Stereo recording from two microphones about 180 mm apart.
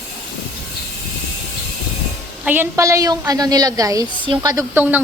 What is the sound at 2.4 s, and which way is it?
Speech, 10° right (ahead or behind).